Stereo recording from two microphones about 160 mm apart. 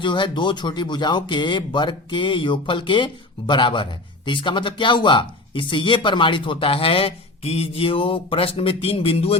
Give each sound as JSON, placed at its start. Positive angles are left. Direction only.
{"t": 0.0, "sound": "speech", "side_deg": 30}